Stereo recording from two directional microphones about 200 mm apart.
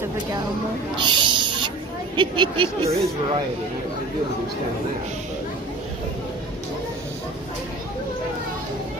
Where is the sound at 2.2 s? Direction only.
25° right (ahead or behind).